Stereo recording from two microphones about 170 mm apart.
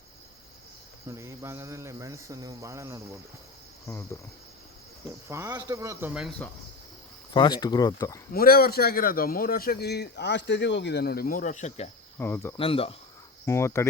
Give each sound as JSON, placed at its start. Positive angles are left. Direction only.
{"t": 1.0, "sound": "speech", "side_deg": -15}
{"t": 3.8, "sound": "cricket", "side_deg": 15}
{"t": 5.3, "sound": "speech", "side_deg": -20}
{"t": 7.3, "sound": "speech", "side_deg": 25}
{"t": 8.3, "sound": "a man's voice", "side_deg": 60}
{"t": 12.1, "sound": "cricket", "side_deg": 15}
{"t": 12.5, "sound": "speech", "side_deg": 35}
{"t": 13.4, "sound": "cricket", "side_deg": 15}